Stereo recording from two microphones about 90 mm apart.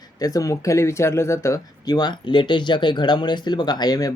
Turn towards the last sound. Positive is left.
turn(degrees=45)  # may be behind; listen again after turning